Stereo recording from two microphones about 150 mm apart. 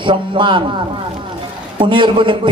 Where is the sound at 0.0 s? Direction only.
35° right (ahead or behind).